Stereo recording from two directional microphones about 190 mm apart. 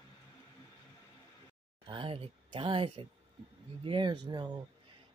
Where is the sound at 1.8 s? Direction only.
25° right (ahead or behind).